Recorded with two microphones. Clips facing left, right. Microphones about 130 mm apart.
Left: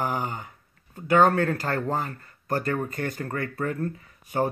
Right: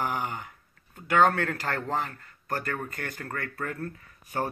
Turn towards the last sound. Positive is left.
turn(degrees=15)  # may be behind; listen again after turning